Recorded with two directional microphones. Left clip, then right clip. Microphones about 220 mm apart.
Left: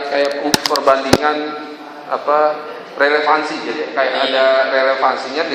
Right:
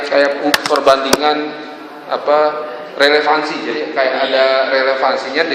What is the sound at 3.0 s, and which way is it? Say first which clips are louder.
Mantra: right 2 dB; 25° right (ahead or behind).